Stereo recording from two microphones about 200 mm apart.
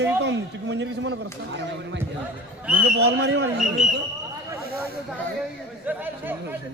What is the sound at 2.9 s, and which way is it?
Speech, 55° right (ahead or behind).